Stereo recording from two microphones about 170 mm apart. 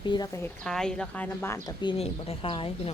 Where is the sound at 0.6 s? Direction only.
5° left (ahead or behind).